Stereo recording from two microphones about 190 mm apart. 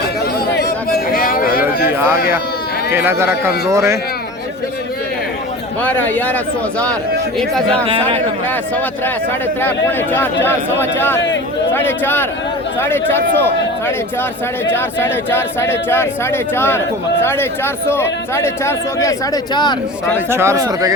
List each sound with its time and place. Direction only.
0.5 s chatter: 55° left (ahead or behind)
2.9 s a man's voice: 10° right (ahead or behind)
5.8 s speech: 10° left (ahead or behind)
7.3 s a man's voice: 5° left (ahead or behind)
9.6 s speech: 10° left (ahead or behind)
20.1 s a man's voice: 15° right (ahead or behind)